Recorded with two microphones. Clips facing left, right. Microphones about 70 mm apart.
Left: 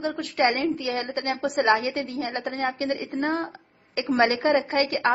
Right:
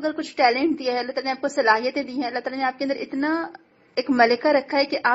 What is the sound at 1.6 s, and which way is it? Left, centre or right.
A woman's voice, centre.